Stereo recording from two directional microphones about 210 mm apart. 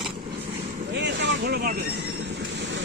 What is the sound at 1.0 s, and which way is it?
Vehicle, 55° right (ahead or behind).